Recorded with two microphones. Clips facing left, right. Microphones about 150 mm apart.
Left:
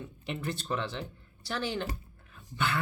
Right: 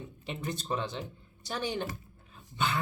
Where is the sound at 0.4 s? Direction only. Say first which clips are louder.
Right 1 dB; 15° right (ahead or behind).